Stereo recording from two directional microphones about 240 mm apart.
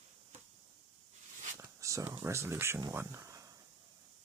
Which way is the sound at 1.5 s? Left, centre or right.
Centre.